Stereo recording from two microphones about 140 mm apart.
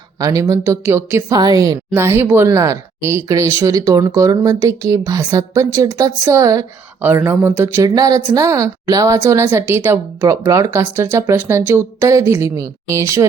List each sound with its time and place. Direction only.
0.2 s speech: 25° right (ahead or behind)
7.8 s speech: 25° right (ahead or behind)